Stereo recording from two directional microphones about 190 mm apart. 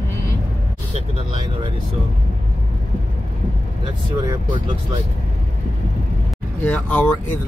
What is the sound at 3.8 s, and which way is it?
Speech, 20° right (ahead or behind).